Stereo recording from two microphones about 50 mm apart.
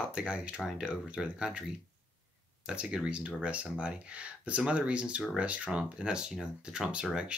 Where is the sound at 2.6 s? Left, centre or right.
Centre.